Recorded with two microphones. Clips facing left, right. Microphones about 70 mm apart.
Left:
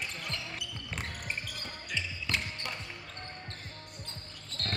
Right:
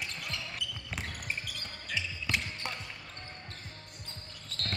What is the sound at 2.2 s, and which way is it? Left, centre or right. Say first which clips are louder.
Basketball bounce: right 1 dB; centre.